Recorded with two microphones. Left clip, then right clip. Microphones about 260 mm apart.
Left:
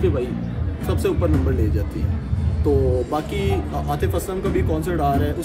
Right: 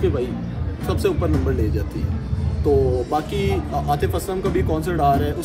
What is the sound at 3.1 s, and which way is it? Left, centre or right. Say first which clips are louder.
A man's voice: right 1 dB; centre.